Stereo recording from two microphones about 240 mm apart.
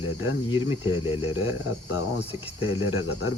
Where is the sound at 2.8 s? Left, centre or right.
Left.